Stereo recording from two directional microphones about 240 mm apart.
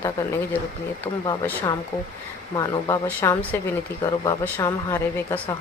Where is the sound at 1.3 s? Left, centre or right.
Centre.